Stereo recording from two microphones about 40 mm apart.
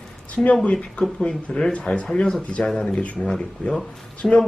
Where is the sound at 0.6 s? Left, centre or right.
Left.